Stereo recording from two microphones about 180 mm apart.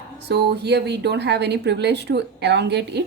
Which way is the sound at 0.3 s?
65° right (ahead or behind).